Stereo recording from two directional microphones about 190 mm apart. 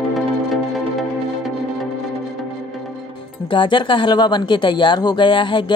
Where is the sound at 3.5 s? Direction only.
25° left (ahead or behind).